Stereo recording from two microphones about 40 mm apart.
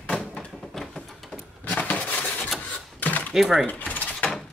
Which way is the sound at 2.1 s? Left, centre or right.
Left.